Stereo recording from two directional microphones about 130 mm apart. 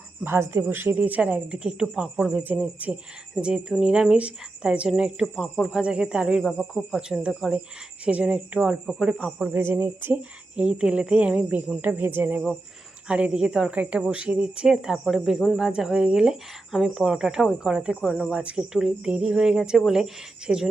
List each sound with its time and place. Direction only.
0.3 s a woman's voice: 15° right (ahead or behind)